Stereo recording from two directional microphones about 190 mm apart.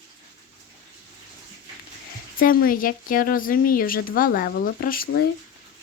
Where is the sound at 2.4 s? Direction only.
50° left (ahead or behind).